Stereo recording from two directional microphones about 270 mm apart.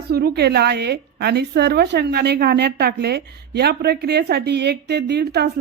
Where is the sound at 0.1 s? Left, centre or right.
Right.